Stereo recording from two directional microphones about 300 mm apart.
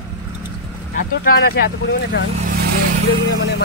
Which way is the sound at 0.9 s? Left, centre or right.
Left.